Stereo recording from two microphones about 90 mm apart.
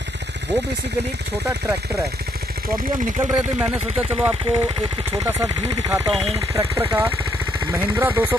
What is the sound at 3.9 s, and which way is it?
Speech, 90° right.